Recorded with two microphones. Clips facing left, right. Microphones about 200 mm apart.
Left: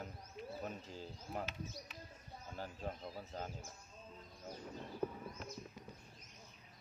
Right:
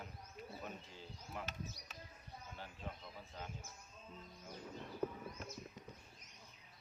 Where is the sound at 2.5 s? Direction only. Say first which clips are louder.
Left 7 dB; 40° left (ahead or behind).